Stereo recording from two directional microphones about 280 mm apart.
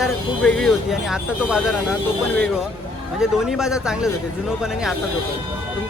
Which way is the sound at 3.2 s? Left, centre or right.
Centre.